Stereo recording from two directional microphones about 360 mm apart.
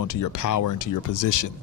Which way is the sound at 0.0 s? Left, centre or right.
Left.